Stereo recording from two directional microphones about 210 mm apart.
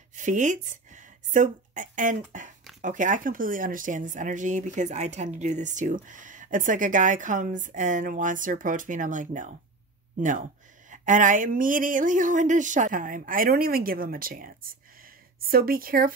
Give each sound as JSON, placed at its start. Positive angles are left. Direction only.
{"t": 0.1, "sound": "speech", "side_deg": -35}
{"t": 10.9, "sound": "speech", "side_deg": -35}